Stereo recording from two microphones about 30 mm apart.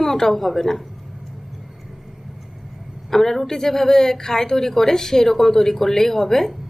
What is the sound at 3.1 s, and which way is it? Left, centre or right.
Speech, centre.